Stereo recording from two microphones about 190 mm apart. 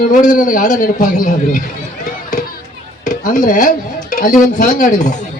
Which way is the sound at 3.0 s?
40° left (ahead or behind).